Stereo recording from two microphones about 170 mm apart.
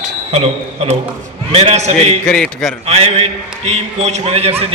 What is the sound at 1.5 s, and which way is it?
Speech, 40° right (ahead or behind).